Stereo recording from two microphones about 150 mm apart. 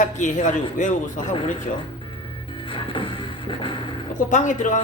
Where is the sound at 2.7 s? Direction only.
35° left (ahead or behind).